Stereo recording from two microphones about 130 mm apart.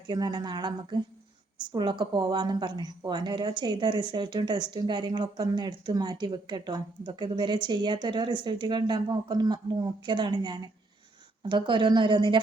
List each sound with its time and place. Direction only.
0.1 s speech: 30° right (ahead or behind)